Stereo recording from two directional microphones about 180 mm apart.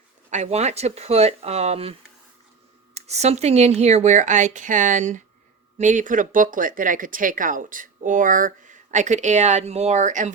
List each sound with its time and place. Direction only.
0.3 s speech: 40° right (ahead or behind)